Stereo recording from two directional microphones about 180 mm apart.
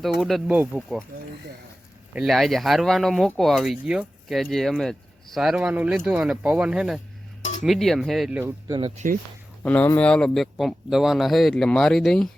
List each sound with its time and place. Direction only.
0.2 s speech: centre (ahead or behind)
2.1 s speech: centre (ahead or behind)
8.4 s speech: 15° right (ahead or behind)
9.6 s speech: 10° left (ahead or behind)